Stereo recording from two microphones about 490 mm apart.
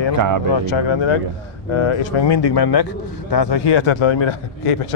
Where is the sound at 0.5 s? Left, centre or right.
Left.